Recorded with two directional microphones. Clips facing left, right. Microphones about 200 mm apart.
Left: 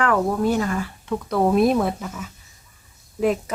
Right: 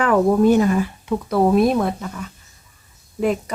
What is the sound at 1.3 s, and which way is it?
Speech, centre (ahead or behind).